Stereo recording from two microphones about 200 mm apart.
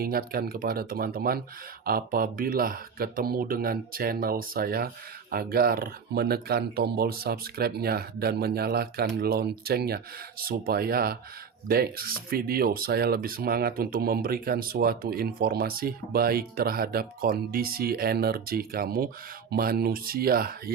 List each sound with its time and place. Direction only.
0.0 s speech: 50° right (ahead or behind)